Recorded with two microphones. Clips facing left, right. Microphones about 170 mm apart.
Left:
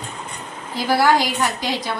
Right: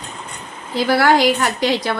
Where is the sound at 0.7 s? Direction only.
65° right (ahead or behind).